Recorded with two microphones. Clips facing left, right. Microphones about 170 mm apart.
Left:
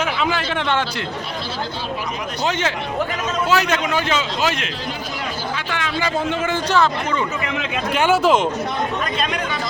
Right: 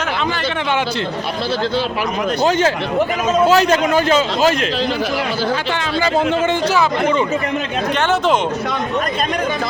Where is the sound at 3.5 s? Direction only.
40° right (ahead or behind).